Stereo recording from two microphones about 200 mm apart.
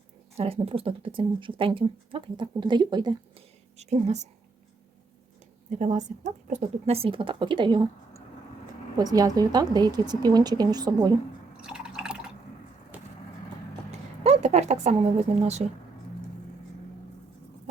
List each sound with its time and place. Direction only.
0.3 s speech: 30° right (ahead or behind)
3.8 s a woman's voice: 35° right (ahead or behind)
5.7 s a woman's voice: 35° right (ahead or behind); by 11.1 s 20° right (ahead or behind)
11.6 s drip: 5° right (ahead or behind)
13.9 s a sound: 30° right (ahead or behind)
15.4 s a woman's voice: 35° right (ahead or behind)